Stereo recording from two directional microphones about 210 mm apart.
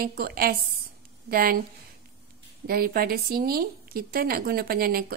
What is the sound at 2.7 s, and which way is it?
A woman's voice, 45° right (ahead or behind).